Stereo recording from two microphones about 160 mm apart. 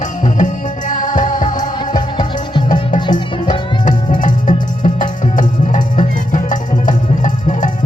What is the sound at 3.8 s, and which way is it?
Music, 55° left (ahead or behind).